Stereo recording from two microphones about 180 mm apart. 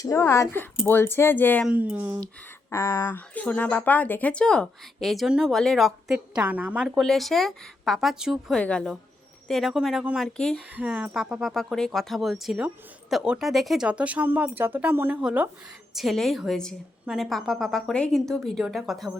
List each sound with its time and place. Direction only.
0.0 s speech: 15° left (ahead or behind)
1.6 s speech: 10° right (ahead or behind)
2.6 s speech: 15° left (ahead or behind)